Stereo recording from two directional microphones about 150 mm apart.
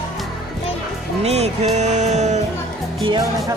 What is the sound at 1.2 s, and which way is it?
Speech, 45° right (ahead or behind).